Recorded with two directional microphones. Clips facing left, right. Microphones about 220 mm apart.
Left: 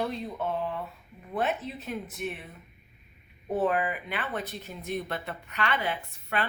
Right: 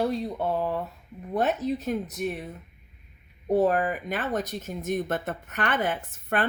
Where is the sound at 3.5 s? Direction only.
40° right (ahead or behind).